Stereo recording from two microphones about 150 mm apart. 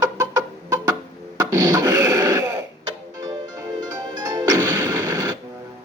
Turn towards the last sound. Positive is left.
turn(degrees=-25)  # may be behind; listen again after turning